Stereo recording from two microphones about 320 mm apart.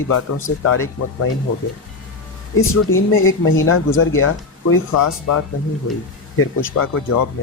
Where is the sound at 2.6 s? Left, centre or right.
Left.